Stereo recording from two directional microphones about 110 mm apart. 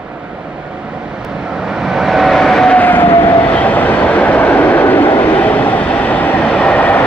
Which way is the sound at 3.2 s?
20° left (ahead or behind).